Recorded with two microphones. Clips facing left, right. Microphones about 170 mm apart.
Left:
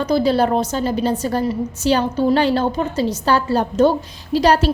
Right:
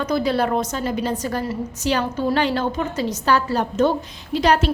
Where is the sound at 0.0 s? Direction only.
30° left (ahead or behind).